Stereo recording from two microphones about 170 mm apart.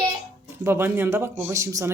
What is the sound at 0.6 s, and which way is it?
Speech, 10° right (ahead or behind).